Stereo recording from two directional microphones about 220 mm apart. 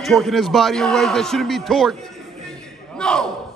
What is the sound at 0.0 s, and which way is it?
A man's voice, centre (ahead or behind).